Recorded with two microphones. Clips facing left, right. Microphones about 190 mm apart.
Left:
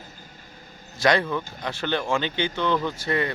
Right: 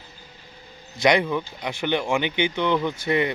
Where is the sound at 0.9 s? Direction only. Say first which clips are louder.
Right 2 dB; 15° right (ahead or behind).